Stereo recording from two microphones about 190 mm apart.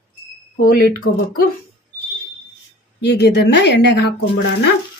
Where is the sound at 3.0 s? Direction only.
60° left (ahead or behind).